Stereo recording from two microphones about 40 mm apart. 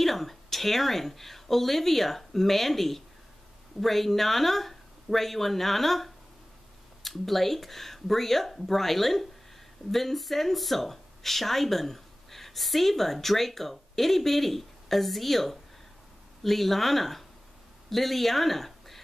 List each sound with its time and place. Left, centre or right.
0.0 s speech: centre